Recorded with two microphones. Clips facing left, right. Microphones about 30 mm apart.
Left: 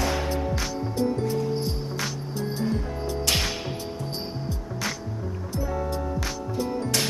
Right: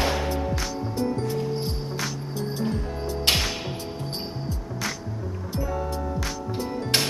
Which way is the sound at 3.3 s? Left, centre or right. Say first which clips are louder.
Right 3 dB; right.